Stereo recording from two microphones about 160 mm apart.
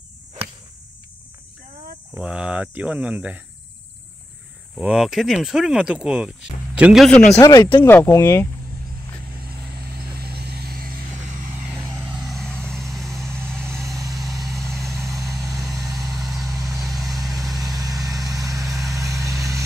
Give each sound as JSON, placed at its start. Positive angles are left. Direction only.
{"t": 0.4, "sound": "a sound", "side_deg": -35}
{"t": 2.1, "sound": "speech", "side_deg": -5}
{"t": 4.7, "sound": "speech", "side_deg": -5}
{"t": 7.3, "sound": "speech", "side_deg": 20}
{"t": 9.9, "sound": "vehicle", "side_deg": -75}
{"t": 12.0, "sound": "vehicle", "side_deg": -5}
{"t": 13.7, "sound": "vehicle", "side_deg": -20}
{"t": 17.3, "sound": "vehicle", "side_deg": 0}
{"t": 17.6, "sound": "vehicle", "side_deg": -20}